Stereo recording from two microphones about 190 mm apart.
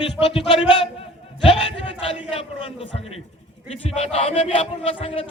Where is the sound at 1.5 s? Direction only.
30° left (ahead or behind).